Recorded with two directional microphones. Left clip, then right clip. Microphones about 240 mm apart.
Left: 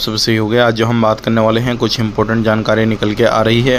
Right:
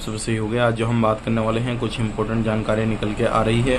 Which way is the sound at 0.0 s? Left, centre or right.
Left.